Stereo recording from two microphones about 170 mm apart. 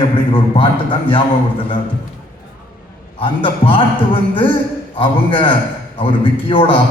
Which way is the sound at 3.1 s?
30° left (ahead or behind).